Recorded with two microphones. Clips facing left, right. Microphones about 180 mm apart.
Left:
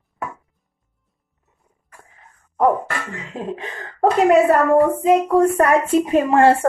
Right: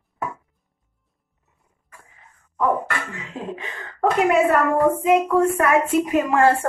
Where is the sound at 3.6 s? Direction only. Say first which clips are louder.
Left 4 dB; 35° left (ahead or behind).